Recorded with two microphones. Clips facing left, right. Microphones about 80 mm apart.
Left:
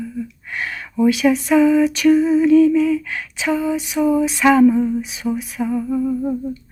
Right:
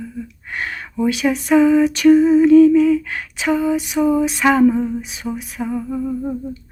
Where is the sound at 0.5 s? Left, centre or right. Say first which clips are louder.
Right 1 dB; right.